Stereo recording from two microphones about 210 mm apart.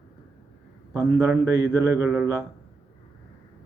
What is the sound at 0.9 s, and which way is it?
Speech, 10° right (ahead or behind).